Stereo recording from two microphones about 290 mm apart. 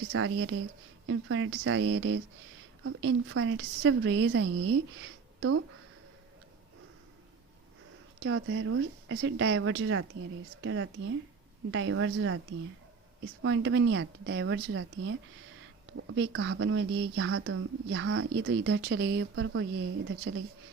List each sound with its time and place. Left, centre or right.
0.1 s a woman's voice: right
8.2 s a woman's voice: right
13.4 s speech: right